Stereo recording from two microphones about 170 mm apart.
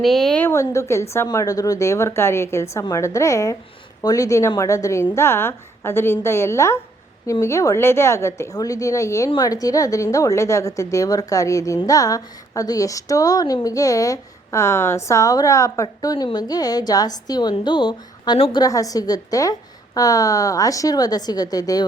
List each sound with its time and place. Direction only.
0.0 s a woman's voice: centre (ahead or behind); by 21.8 s 20° left (ahead or behind)